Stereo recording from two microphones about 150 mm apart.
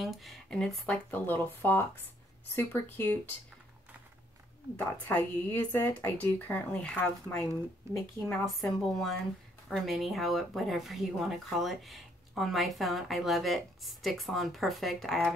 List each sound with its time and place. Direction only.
0.0 s speech: centre (ahead or behind); by 3.2 s 15° left (ahead or behind)
5.0 s speech: 15° left (ahead or behind)
7.8 s a woman's voice: 20° right (ahead or behind)
8.5 s speech: centre (ahead or behind)